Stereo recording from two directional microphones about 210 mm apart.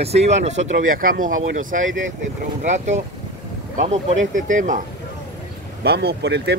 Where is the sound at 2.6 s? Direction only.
35° right (ahead or behind).